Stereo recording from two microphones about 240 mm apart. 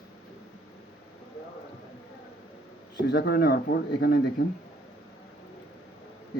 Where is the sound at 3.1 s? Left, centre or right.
Left.